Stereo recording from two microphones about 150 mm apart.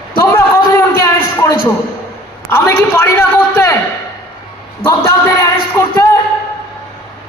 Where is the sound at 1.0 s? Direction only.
20° left (ahead or behind).